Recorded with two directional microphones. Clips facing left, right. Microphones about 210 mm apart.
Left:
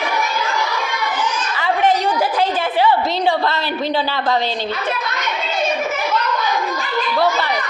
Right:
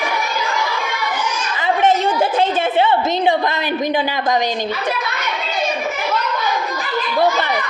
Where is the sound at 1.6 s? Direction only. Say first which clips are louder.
Right 1 dB; 25° right (ahead or behind).